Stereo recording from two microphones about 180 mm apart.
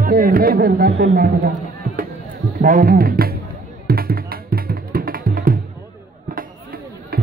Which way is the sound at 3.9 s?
55° right (ahead or behind).